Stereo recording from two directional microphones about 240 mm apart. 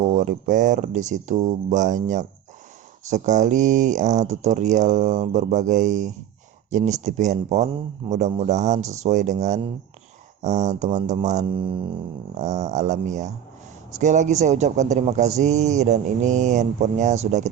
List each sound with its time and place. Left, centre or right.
0.1 s speech: right